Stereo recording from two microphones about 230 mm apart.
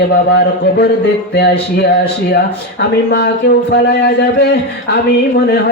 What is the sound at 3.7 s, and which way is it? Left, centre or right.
Music, left.